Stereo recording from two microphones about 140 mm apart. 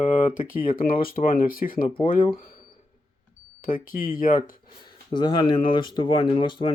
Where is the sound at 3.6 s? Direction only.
85° left.